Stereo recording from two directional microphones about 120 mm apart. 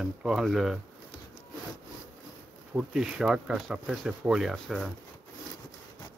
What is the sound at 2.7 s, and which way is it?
Speech, 5° right (ahead or behind).